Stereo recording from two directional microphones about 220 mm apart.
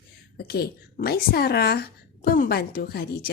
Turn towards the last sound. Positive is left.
turn(degrees=45)  # may be behind; listen again after turning